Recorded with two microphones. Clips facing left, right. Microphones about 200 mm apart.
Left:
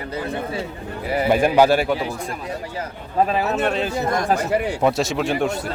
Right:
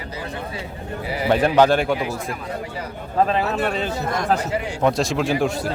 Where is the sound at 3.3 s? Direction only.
5° left (ahead or behind).